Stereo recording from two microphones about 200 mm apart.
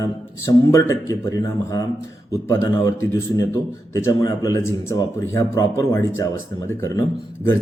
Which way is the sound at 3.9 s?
15° left (ahead or behind).